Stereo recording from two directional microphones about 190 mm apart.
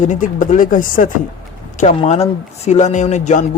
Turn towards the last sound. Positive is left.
turn(degrees=40)  # may be behind; listen again after turning